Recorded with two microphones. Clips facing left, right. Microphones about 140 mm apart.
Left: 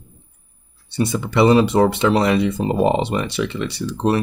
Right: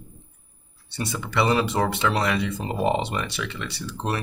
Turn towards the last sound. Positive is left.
turn(degrees=25)  # may be behind; listen again after turning